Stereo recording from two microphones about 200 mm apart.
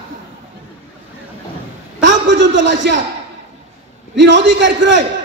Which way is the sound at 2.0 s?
60° right (ahead or behind).